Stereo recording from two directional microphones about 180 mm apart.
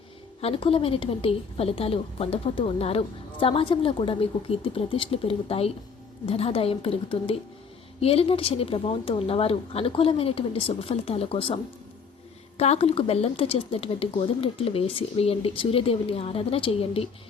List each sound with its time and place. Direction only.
0.4 s a woman's voice: 30° left (ahead or behind)